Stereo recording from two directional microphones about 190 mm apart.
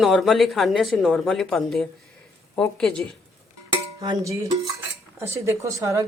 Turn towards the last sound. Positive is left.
turn(degrees=-15)  # may be behind; listen again after turning